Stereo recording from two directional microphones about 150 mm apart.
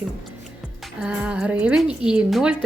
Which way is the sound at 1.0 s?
5° right (ahead or behind).